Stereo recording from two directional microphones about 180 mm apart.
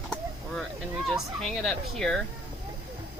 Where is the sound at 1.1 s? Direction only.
Centre (ahead or behind).